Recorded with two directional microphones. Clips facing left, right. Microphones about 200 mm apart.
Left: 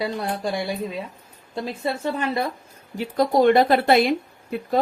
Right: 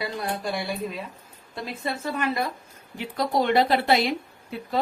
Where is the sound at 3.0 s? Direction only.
50° left (ahead or behind).